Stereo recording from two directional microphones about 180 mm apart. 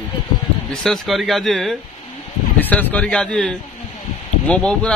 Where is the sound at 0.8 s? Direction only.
Centre (ahead or behind).